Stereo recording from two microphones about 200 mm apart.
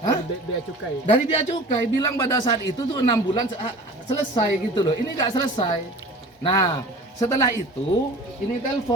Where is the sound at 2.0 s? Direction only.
20° left (ahead or behind).